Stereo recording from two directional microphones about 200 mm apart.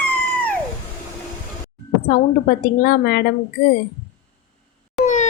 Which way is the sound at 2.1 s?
45° left (ahead or behind).